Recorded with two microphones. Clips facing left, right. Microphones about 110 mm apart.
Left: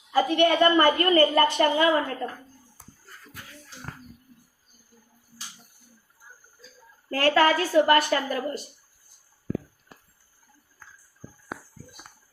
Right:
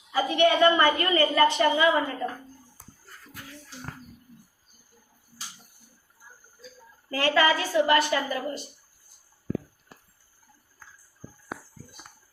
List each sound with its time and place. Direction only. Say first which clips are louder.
0.1 s a woman's voice: left 1 dB; 45° left (ahead or behind)
7.1 s a woman's voice: left 2 dB; 45° left (ahead or behind)